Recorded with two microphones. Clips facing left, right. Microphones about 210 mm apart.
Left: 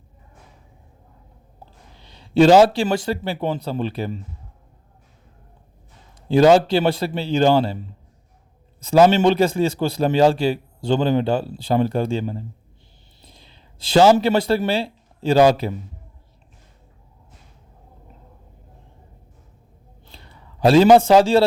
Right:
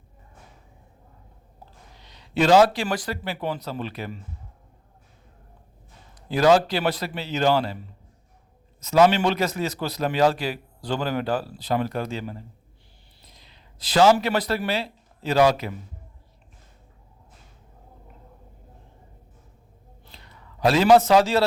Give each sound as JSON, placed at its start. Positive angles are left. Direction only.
{"t": 2.0, "sound": "a man's voice", "side_deg": 30}
{"t": 6.2, "sound": "a man's voice", "side_deg": 30}
{"t": 8.8, "sound": "a man's voice", "side_deg": 30}
{"t": 20.1, "sound": "a man's voice", "side_deg": 30}